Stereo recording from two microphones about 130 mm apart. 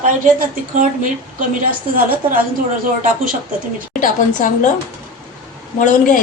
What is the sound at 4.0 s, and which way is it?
Speech, 90° left.